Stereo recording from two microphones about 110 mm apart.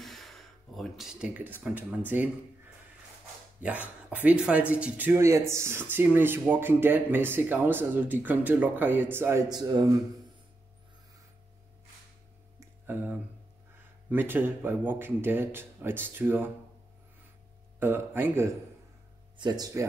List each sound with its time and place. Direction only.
0.0 s gasp: centre (ahead or behind)
1.3 s speech: 15° right (ahead or behind)
3.6 s speech: 15° right (ahead or behind)
9.5 s speech: 40° right (ahead or behind)
12.5 s a sound: 20° right (ahead or behind)
14.1 s speech: 20° right (ahead or behind)
17.7 s speech: 20° right (ahead or behind)
19.3 s speech: 40° right (ahead or behind)